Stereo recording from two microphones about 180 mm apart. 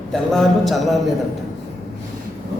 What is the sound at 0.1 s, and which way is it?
Speech, centre (ahead or behind).